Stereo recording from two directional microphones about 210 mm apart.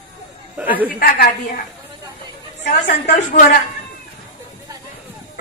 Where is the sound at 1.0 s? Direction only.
45° left (ahead or behind).